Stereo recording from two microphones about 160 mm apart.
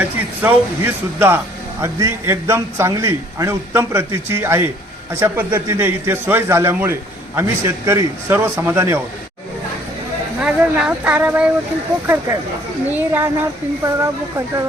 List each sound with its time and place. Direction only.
0.0 s a man's voice: 10° right (ahead or behind)
10.4 s a man's voice: 5° right (ahead or behind)